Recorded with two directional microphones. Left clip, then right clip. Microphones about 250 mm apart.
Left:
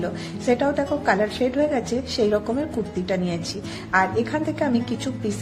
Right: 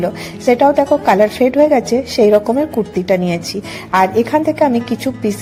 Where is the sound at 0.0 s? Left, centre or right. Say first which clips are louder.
Right 10 dB; right.